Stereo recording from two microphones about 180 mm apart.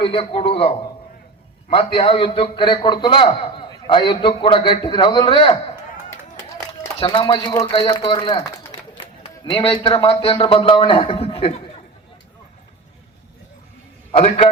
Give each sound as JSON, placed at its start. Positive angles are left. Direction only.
{"t": 0.0, "sound": "a man's voice", "side_deg": 30}
{"t": 1.7, "sound": "a man's voice", "side_deg": 30}
{"t": 7.0, "sound": "a man's voice", "side_deg": 30}